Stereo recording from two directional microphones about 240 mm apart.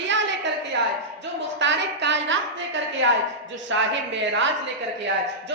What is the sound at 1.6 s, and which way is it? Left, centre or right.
A woman's voice, right.